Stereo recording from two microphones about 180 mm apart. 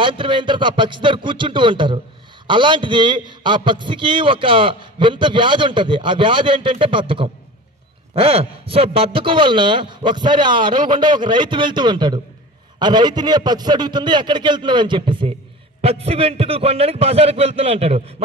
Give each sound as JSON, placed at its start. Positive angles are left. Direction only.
{"t": 0.0, "sound": "a man's voice", "side_deg": -30}